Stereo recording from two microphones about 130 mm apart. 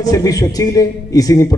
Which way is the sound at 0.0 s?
30° left (ahead or behind).